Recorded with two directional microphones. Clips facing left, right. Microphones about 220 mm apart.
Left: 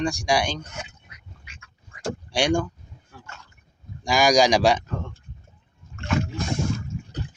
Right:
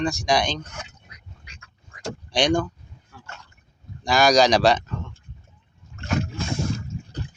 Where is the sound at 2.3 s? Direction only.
10° left (ahead or behind).